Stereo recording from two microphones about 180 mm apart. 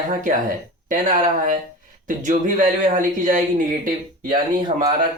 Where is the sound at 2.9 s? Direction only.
45° right (ahead or behind).